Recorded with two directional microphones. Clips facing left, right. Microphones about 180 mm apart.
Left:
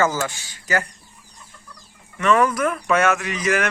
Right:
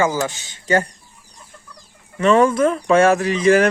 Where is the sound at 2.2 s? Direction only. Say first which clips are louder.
Right 4 dB; 30° right (ahead or behind).